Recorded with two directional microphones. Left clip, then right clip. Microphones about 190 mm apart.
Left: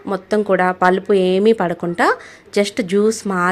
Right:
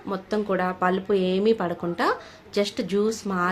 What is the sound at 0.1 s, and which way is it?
Speech, 40° left (ahead or behind).